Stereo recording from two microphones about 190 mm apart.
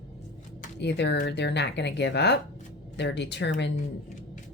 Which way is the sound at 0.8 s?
65° left (ahead or behind).